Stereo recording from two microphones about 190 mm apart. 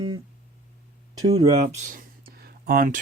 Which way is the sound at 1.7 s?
45° right (ahead or behind).